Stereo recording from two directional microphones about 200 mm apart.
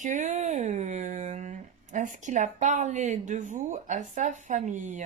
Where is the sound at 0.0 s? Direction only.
35° right (ahead or behind).